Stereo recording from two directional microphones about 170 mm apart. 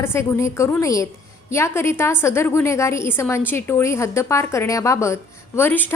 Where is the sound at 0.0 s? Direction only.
15° left (ahead or behind).